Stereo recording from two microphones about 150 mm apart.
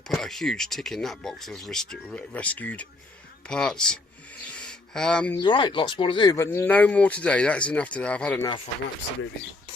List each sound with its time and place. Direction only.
0.1 s speech: centre (ahead or behind)
4.5 s a sound: 5° left (ahead or behind)
5.4 s speech: 30° left (ahead or behind)
6.3 s speech: 15° left (ahead or behind)